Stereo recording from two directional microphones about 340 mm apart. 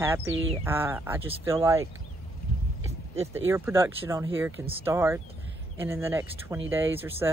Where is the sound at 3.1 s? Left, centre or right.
Centre.